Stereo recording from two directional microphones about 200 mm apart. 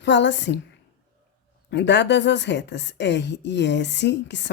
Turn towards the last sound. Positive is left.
turn(degrees=60)  # may be behind; listen again after turning